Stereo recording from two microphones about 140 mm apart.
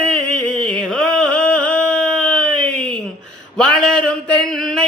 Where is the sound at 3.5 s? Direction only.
5° left (ahead or behind).